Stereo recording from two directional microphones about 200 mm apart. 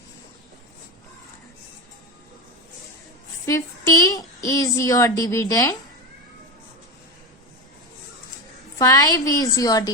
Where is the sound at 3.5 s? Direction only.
15° left (ahead or behind).